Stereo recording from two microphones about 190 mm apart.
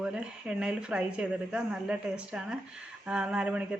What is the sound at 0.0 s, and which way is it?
Speech, 5° right (ahead or behind).